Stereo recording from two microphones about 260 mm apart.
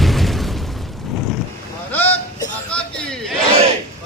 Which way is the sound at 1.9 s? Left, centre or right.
Centre.